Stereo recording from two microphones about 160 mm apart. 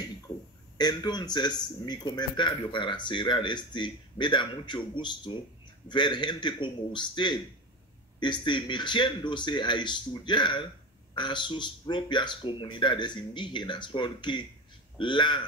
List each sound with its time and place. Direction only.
0.7 s a man's voice: 25° left (ahead or behind)